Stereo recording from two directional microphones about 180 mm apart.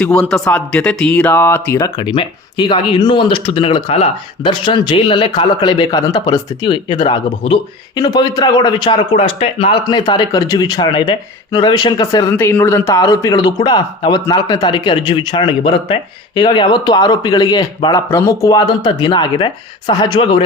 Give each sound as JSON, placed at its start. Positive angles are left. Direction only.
{"t": 0.0, "sound": "speech", "side_deg": 5}
{"t": 9.8, "sound": "speech", "side_deg": 25}